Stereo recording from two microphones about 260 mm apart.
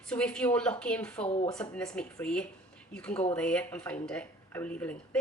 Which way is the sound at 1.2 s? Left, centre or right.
Left.